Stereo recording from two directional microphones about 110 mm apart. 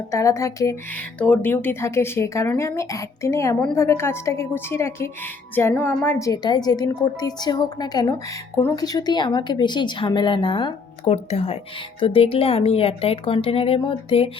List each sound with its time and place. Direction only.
0.1 s speech: 25° left (ahead or behind)
0.9 s a woman's voice: 15° left (ahead or behind); by 10.8 s 50° left (ahead or behind)
11.0 s speech: 70° left (ahead or behind)